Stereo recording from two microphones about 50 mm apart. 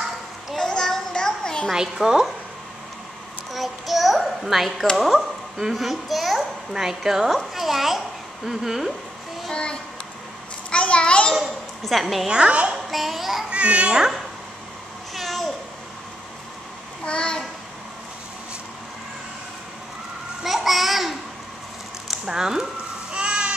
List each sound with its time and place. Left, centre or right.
0.6 s a sound: centre
1.7 s a woman's voice: centre
3.5 s a child's voice: centre
9.5 s a child's voice: centre
10.7 s a sound: left
11.8 s a child's voice: centre
12.3 s a child's voice: right
12.9 s a child's voice: centre
13.5 s a child's voice: right
15.1 s meow: centre
17.0 s a child's voice: left
20.4 s a child's voice: centre
23.1 s a sound: centre